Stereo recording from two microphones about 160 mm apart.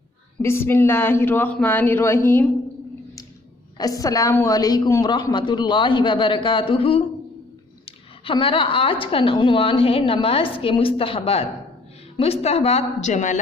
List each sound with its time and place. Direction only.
0.4 s speech: 15° left (ahead or behind)
3.8 s a woman's voice: 20° left (ahead or behind); by 13.4 s 50° left (ahead or behind)